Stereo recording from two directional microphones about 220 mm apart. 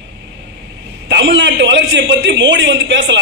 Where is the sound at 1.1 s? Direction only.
55° right (ahead or behind).